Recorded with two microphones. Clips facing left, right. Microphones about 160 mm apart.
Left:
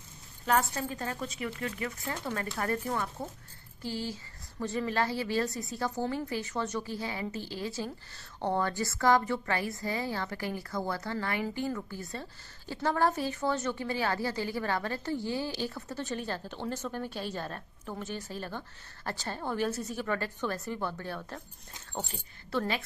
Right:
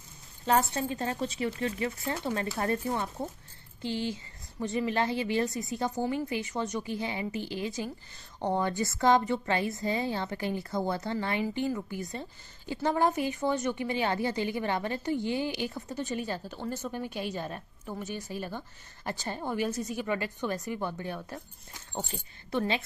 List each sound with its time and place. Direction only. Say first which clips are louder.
0.5 s a woman's voice: right 2 dB; 25° right (ahead or behind)
22.5 s a woman's voice: right 2 dB; 20° right (ahead or behind)